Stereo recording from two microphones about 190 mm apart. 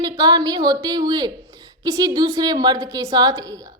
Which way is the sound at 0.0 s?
20° right (ahead or behind).